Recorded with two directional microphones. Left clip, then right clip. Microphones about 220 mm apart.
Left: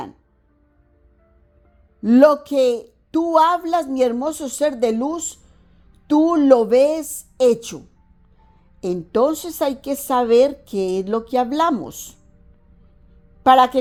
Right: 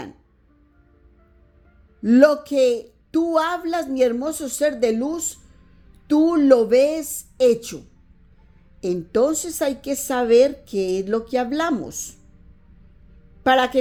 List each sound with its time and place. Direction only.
2.0 s a woman's voice: 15° left (ahead or behind)
8.8 s a woman's voice: 20° left (ahead or behind)
13.4 s a woman's voice: 20° left (ahead or behind)